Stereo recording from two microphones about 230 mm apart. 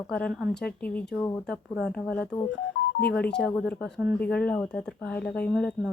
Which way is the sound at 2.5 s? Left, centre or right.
Left.